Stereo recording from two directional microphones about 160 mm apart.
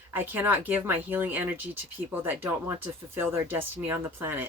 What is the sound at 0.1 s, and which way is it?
Speech, 10° right (ahead or behind).